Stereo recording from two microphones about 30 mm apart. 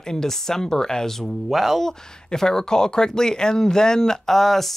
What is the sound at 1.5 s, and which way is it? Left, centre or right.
Speech, centre.